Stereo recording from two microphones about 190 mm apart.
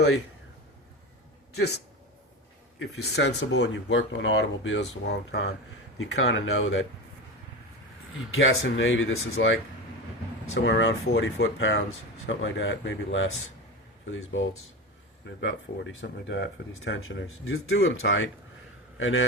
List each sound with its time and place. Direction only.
1.5 s speech: 60° left (ahead or behind)
6.0 s speech: 85° left
8.3 s a man's voice: 90° left